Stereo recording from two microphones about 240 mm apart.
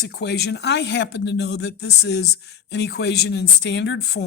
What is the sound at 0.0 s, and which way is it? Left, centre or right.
Speech, left.